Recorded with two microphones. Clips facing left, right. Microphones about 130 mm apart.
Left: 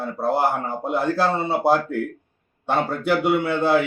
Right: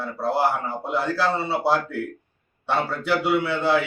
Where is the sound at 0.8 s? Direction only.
50° left (ahead or behind).